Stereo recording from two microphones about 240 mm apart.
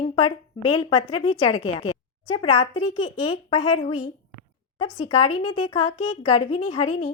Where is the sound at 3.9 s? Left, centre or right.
Left.